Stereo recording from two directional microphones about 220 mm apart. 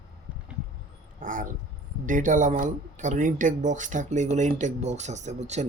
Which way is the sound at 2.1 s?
35° right (ahead or behind).